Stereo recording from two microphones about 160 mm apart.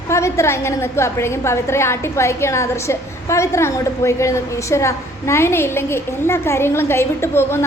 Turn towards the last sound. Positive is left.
turn(degrees=15)  # may be behind; listen again after turning